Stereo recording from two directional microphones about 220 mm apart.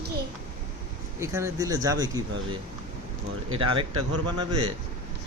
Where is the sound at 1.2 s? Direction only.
10° right (ahead or behind).